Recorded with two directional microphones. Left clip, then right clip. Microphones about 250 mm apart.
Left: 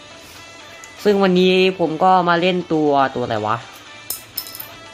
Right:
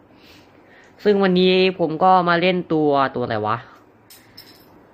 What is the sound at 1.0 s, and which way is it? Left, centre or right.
Speech, centre.